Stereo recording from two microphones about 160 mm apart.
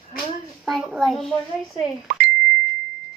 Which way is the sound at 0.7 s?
Centre (ahead or behind).